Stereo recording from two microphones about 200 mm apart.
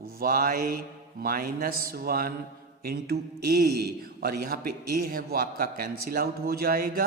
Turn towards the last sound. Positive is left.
turn(degrees=-50)  # may be behind; listen again after turning